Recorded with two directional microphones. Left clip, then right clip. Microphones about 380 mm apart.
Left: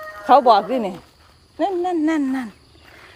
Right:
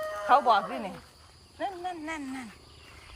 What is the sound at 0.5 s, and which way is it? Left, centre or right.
Speech, centre.